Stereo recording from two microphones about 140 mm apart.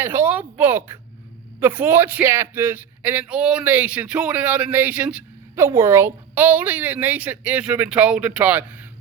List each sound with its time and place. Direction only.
0.0 s speech: 15° right (ahead or behind)